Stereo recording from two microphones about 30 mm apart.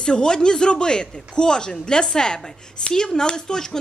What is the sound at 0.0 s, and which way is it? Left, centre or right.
Speech, left.